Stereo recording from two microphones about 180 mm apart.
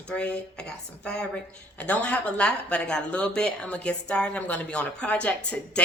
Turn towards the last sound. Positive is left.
turn(degrees=5)  # may be behind; listen again after turning